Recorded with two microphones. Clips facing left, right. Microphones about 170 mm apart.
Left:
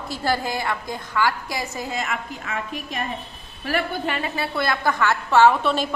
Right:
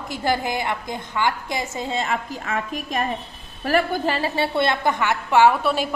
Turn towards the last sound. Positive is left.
turn(degrees=-10)  # may be behind; listen again after turning